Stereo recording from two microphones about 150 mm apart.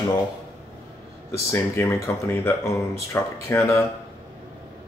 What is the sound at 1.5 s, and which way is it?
Speech, 20° left (ahead or behind).